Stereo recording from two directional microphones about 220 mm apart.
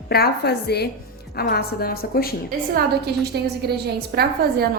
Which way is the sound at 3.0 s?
45° right (ahead or behind).